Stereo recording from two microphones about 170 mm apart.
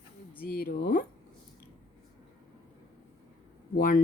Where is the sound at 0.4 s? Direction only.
60° left (ahead or behind).